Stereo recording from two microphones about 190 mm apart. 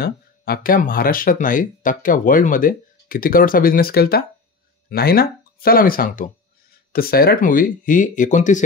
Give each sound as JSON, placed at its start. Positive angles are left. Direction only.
{"t": 0.0, "sound": "speech", "side_deg": 50}